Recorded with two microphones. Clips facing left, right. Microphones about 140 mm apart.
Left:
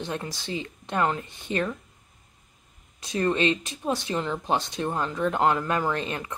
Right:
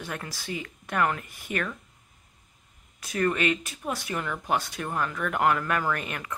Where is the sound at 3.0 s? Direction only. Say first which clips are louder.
Left 2 dB; 25° left (ahead or behind).